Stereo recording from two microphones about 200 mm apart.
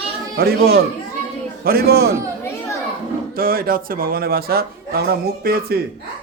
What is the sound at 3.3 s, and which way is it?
A man's voice, 50° right (ahead or behind).